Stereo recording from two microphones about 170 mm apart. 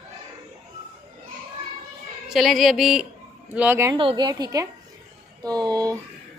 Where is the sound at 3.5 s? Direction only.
15° right (ahead or behind).